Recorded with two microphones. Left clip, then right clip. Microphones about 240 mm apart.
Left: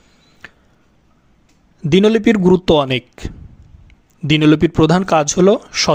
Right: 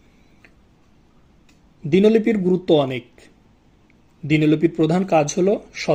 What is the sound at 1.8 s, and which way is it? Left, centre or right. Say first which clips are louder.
Speech: left 3 dB; left.